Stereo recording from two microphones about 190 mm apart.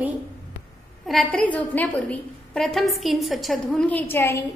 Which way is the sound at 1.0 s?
5° left (ahead or behind).